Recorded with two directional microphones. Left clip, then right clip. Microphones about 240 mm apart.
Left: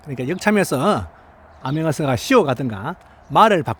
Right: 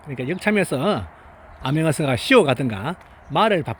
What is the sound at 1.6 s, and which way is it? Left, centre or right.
Speech, centre.